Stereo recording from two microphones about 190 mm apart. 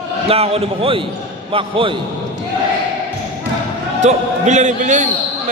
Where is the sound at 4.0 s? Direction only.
40° right (ahead or behind).